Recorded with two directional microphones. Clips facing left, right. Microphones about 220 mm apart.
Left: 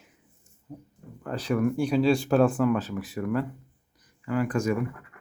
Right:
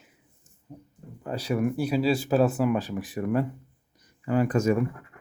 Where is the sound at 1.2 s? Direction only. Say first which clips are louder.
Left 1 dB; 10° right (ahead or behind).